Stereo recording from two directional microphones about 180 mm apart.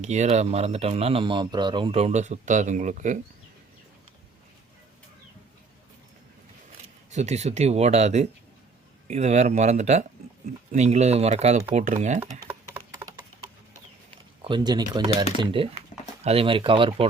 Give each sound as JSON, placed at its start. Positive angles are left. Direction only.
{"t": 0.0, "sound": "speech", "side_deg": -40}
{"t": 7.1, "sound": "speech", "side_deg": -40}
{"t": 12.2, "sound": "typing", "side_deg": -10}
{"t": 14.4, "sound": "speech", "side_deg": -25}